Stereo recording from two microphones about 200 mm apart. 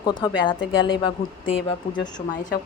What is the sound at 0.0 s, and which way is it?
A woman's voice, 25° left (ahead or behind).